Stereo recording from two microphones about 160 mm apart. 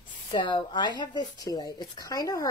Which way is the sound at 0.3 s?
30° left (ahead or behind).